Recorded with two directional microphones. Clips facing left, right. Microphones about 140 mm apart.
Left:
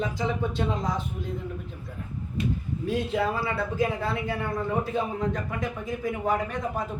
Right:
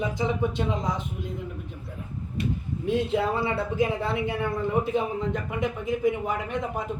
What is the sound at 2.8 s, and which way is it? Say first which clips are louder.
Speech: right 2 dB; 20° right (ahead or behind).